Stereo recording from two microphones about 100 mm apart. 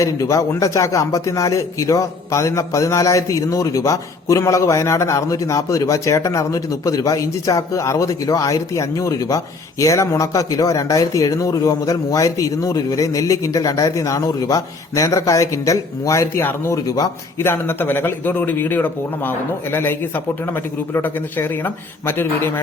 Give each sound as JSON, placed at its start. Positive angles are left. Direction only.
{"t": 0.0, "sound": "a man's voice", "side_deg": 35}
{"t": 16.7, "sound": "a man's voice", "side_deg": 35}
{"t": 17.3, "sound": "speech", "side_deg": 25}